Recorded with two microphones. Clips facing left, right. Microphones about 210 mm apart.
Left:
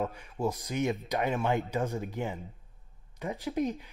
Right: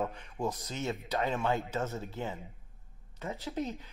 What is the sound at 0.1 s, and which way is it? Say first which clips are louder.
Speech: left 3 dB; 10° left (ahead or behind).